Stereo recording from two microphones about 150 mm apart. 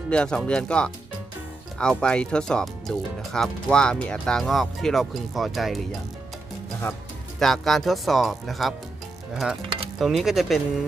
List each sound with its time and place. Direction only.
0.1 s speech: 5° left (ahead or behind)
6.8 s speech: 15° left (ahead or behind)
7.3 s speech: centre (ahead or behind)